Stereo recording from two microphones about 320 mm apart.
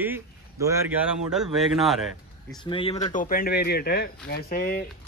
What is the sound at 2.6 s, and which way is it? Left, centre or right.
Speech, centre.